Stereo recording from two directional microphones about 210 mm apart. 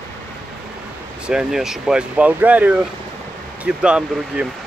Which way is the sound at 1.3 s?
5° right (ahead or behind).